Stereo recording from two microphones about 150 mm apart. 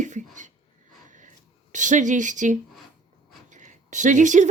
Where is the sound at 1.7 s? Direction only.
55° right (ahead or behind).